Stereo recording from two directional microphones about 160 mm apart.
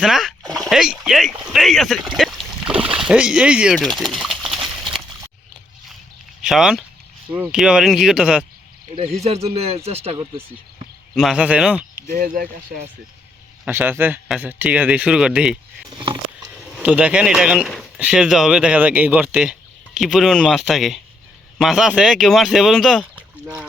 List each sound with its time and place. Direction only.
0.0 s speech: 5° right (ahead or behind)
2.1 s boat: centre (ahead or behind)
2.8 s speech: 5° right (ahead or behind)
4.2 s a sound: centre (ahead or behind)
6.4 s speech: 5° right (ahead or behind)
9.2 s speech: 40° right (ahead or behind)
11.1 s speech: centre (ahead or behind)
12.1 s speech: 60° right (ahead or behind)
13.7 s speech: 15° right (ahead or behind)
16.7 s speech: 10° right (ahead or behind)